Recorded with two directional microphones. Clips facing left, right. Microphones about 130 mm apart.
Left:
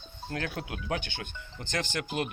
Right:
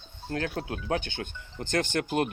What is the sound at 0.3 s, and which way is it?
Speech, 35° right (ahead or behind).